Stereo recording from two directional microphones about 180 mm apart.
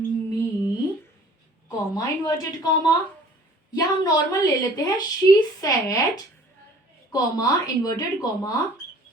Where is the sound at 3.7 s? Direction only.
20° left (ahead or behind).